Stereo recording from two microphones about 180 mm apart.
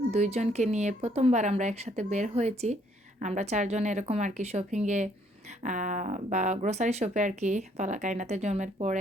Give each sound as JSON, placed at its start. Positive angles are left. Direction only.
{"t": 0.1, "sound": "speech", "side_deg": -35}